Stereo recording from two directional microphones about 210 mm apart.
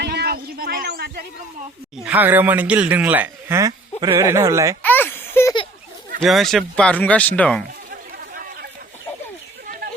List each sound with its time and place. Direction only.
0.0 s a sound: 50° right (ahead or behind)
2.0 s a man's voice: 10° right (ahead or behind)
4.8 s baby laughter: 10° left (ahead or behind)
6.1 s speech: centre (ahead or behind)